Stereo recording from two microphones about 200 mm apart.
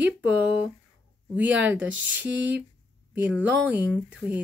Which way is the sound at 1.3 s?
10° right (ahead or behind).